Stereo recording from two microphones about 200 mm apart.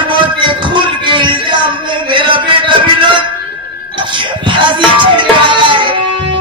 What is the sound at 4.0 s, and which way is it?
Music, 25° right (ahead or behind).